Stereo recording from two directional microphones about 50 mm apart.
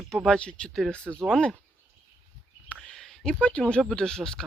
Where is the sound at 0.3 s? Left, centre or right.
Centre.